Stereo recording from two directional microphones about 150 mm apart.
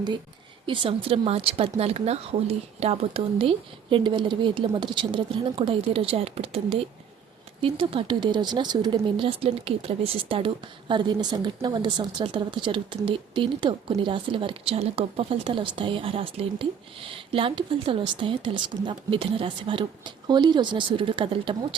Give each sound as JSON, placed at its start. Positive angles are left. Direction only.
{"t": 0.7, "sound": "speech", "side_deg": -35}